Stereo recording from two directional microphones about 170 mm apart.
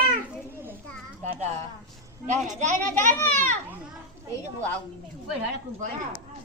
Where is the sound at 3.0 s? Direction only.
45° right (ahead or behind).